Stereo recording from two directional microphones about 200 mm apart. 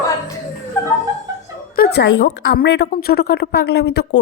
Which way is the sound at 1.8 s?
55° left (ahead or behind).